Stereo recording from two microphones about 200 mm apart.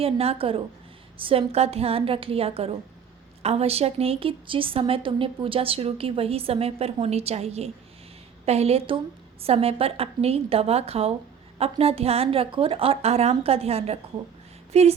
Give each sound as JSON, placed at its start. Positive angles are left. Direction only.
{"t": 0.0, "sound": "a woman's voice", "side_deg": -30}